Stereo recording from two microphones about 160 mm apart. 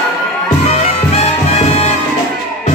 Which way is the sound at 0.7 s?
40° left (ahead or behind).